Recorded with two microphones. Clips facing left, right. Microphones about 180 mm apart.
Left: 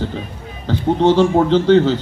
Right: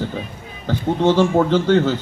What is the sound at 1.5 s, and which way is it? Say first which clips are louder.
Speech: left 4 dB; 50° right (ahead or behind).